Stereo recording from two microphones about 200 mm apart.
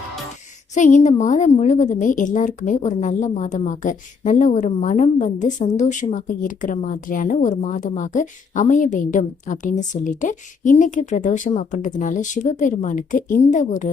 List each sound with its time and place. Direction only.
0.7 s a woman's voice: 40° left (ahead or behind)